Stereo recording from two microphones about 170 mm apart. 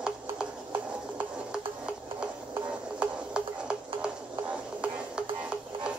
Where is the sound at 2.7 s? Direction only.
5° right (ahead or behind).